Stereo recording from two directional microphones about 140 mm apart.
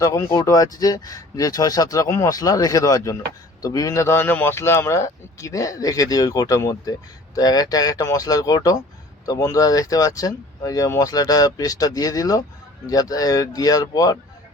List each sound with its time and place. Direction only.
0.0 s speech: 20° left (ahead or behind)